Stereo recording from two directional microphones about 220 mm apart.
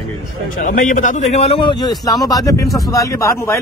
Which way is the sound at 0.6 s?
35° left (ahead or behind).